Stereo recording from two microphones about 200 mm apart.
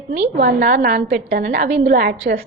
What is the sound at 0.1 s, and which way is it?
A woman's voice, 45° right (ahead or behind).